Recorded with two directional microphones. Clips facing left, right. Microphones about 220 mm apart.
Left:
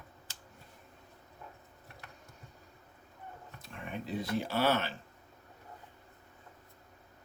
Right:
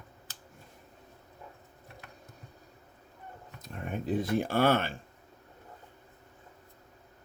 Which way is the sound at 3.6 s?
45° right (ahead or behind).